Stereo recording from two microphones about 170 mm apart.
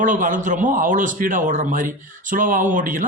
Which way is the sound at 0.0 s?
50° right (ahead or behind).